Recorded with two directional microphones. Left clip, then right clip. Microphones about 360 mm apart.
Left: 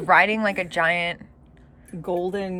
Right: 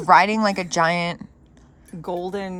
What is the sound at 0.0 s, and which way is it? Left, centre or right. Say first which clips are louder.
Speech: right 2 dB; centre.